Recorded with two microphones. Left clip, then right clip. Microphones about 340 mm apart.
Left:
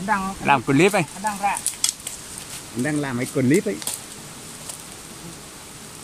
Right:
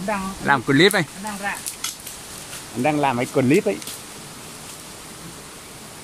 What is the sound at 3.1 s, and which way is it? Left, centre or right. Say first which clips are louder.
Speech: right 4 dB; right.